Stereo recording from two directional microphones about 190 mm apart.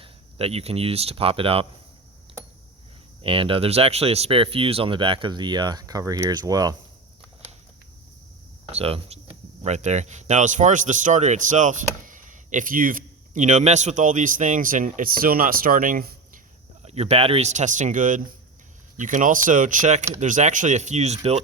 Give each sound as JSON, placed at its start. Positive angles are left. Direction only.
{"t": 0.0, "sound": "speech", "side_deg": -30}
{"t": 3.2, "sound": "speech", "side_deg": -25}
{"t": 8.6, "sound": "speech", "side_deg": -30}
{"t": 16.8, "sound": "speech", "side_deg": -35}